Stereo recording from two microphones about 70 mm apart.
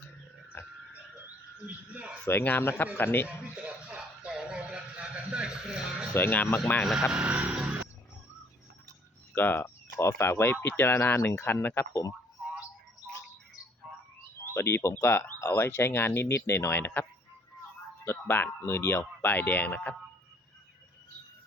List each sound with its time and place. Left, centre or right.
0.5 s frog: left
1.5 s frog: centre
2.2 s speech: left
3.2 s music: centre
6.1 s speech: left
7.1 s speech: centre
9.3 s speech: left
9.6 s speech: left
13.9 s a sound: centre
14.4 s speech: left; by 20.0 s centre